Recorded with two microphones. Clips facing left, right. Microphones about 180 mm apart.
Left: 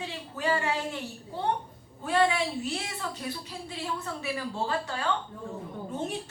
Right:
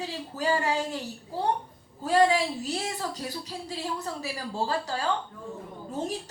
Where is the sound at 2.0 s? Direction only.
35° right (ahead or behind).